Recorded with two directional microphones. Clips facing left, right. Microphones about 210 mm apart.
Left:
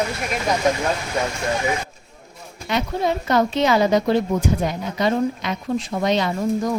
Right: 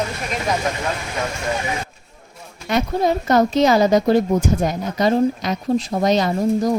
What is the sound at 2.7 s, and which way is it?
A woman's voice, 40° right (ahead or behind).